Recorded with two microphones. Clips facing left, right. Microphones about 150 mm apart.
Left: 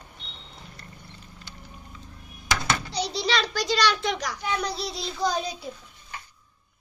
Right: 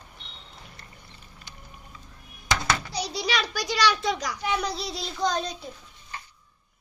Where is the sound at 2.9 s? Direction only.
10° right (ahead or behind).